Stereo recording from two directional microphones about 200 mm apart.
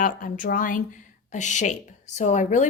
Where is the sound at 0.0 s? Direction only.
45° left (ahead or behind).